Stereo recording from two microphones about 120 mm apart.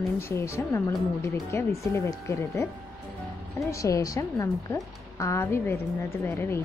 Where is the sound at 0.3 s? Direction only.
25° left (ahead or behind).